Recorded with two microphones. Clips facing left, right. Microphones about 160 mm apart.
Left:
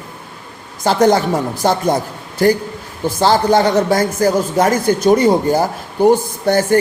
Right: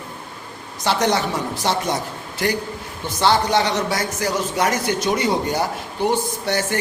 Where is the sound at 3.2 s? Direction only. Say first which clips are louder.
Left 5 dB; 45° left (ahead or behind).